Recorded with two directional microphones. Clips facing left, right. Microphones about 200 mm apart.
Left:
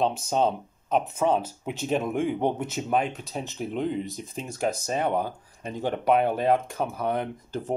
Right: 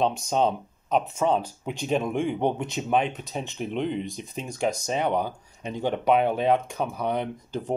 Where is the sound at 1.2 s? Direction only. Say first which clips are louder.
Even; 5° left (ahead or behind).